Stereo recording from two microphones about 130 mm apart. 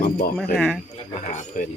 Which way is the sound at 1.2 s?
90° left.